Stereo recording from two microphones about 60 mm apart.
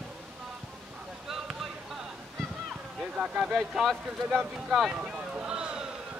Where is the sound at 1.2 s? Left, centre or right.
Centre.